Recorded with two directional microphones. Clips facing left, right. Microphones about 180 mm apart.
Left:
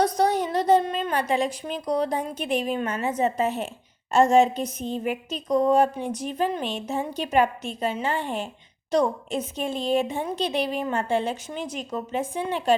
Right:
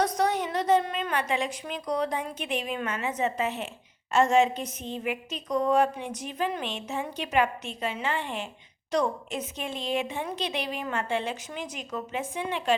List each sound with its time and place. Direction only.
0.0 s a woman's voice: 30° left (ahead or behind)